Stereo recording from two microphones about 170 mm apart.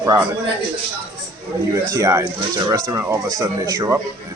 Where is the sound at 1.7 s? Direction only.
20° right (ahead or behind).